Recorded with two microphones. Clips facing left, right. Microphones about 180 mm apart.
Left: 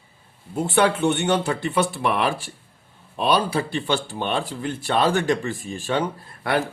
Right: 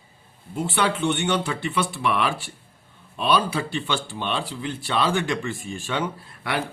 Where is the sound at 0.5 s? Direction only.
50° left (ahead or behind).